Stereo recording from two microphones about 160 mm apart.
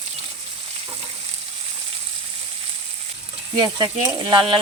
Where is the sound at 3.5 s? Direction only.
30° right (ahead or behind).